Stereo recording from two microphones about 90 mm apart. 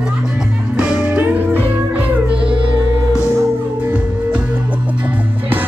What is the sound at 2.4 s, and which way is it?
Music, 75° right (ahead or behind).